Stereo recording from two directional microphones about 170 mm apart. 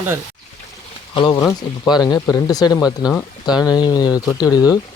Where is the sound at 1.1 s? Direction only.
25° left (ahead or behind).